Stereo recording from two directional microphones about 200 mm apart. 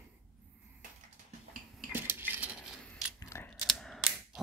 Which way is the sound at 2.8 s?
5° left (ahead or behind).